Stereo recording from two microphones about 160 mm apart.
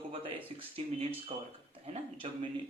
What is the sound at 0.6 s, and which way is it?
Speech, 35° right (ahead or behind).